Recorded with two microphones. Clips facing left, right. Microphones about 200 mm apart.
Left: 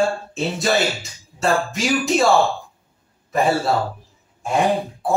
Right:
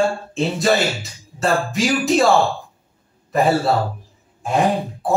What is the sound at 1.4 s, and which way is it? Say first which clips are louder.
Music: right 1 dB; centre (ahead or behind).